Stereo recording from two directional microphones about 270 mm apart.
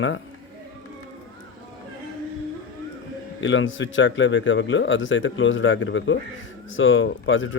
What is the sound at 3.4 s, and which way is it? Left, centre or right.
A man's voice, left.